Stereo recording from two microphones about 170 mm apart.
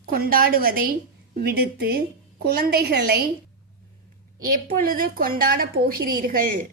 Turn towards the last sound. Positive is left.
turn(degrees=-55)  # may be behind; listen again after turning